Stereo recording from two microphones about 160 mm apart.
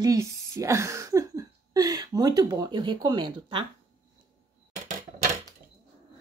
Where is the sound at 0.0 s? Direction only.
20° right (ahead or behind).